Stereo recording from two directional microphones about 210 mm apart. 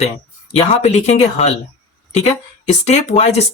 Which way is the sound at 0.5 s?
35° left (ahead or behind).